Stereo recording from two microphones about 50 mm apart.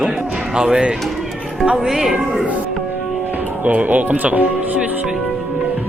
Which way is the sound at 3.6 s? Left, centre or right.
Right.